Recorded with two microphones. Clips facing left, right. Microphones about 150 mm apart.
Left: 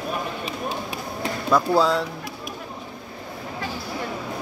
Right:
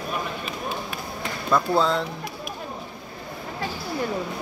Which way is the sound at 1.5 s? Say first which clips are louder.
Left 2 dB; 5° left (ahead or behind).